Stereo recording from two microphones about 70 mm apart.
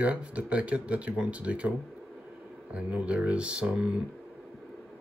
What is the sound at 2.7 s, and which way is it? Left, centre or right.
Speech, centre.